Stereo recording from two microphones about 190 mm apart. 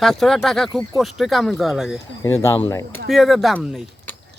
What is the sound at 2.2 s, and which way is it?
Speech, 15° left (ahead or behind).